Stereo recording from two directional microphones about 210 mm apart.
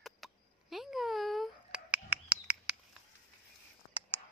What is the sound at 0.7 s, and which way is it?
Bird, centre (ahead or behind).